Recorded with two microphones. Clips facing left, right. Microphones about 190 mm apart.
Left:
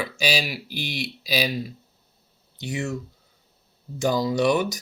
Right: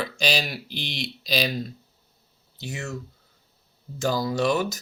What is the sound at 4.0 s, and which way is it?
Speech, 15° left (ahead or behind).